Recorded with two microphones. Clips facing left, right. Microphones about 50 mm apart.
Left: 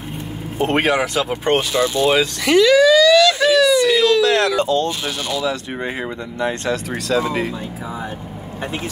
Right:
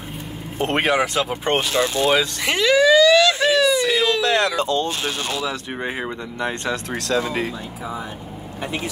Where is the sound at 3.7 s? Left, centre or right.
Centre.